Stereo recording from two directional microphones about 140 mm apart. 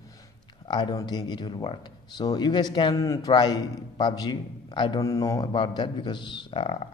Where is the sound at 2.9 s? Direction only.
25° left (ahead or behind).